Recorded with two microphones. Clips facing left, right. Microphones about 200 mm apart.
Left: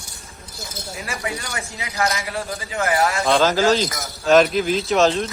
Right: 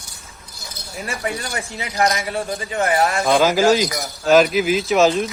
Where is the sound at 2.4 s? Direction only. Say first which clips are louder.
Right 3 dB; 30° right (ahead or behind).